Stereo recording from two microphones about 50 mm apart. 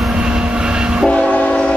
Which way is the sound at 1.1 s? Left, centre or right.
Left.